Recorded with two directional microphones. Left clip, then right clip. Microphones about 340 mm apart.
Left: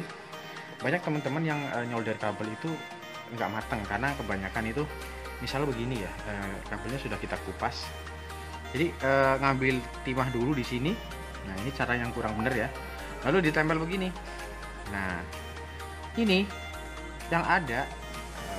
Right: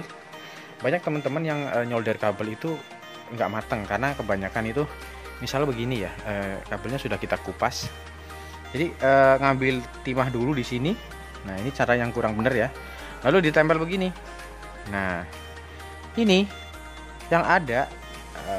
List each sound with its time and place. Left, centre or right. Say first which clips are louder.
0.8 s speech: right 5 dB; right
3.3 s speech: right 6 dB; right